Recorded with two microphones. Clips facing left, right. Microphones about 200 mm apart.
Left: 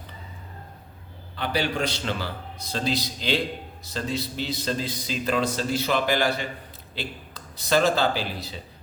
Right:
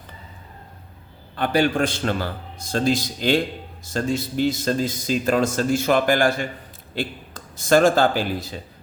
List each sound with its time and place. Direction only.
1.4 s a man's voice: 50° right (ahead or behind)